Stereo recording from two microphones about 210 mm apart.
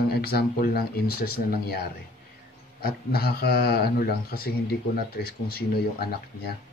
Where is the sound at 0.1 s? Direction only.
45° left (ahead or behind).